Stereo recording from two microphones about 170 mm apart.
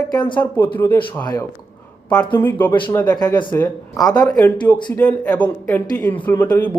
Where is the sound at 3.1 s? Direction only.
25° left (ahead or behind).